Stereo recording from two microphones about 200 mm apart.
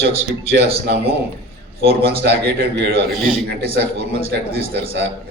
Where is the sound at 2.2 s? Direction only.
55° right (ahead or behind).